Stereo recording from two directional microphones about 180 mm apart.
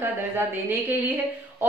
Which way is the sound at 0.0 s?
10° right (ahead or behind).